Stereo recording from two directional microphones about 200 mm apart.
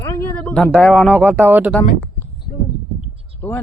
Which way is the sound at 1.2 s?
10° right (ahead or behind).